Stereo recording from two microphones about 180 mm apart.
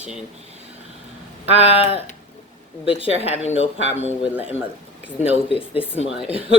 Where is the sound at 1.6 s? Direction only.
35° left (ahead or behind).